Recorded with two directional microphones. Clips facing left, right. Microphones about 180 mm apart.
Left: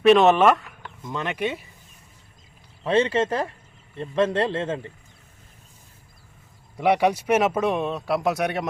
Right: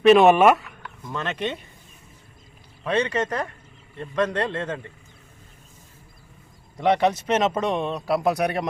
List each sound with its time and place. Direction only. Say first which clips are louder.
0.2 s speech: right 2 dB; 10° right (ahead or behind)
1.0 s speech: left 1 dB; 15° left (ahead or behind)
2.8 s a man's voice: left 3 dB; 25° left (ahead or behind)
6.7 s speech: even; 10° left (ahead or behind)